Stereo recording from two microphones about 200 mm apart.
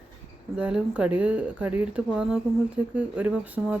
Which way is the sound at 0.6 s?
5° right (ahead or behind).